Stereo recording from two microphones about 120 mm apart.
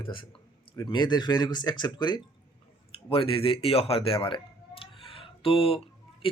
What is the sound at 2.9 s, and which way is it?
Speech, 50° left (ahead or behind).